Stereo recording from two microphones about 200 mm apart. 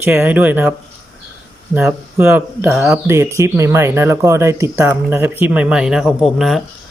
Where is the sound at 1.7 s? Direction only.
10° right (ahead or behind).